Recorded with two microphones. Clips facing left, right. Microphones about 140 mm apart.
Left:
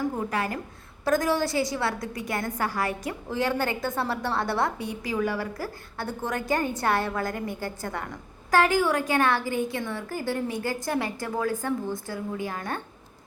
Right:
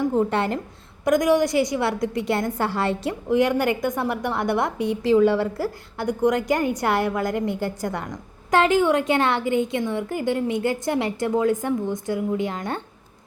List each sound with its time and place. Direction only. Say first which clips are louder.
0.1 s a woman's voice: right 7 dB; 25° right (ahead or behind)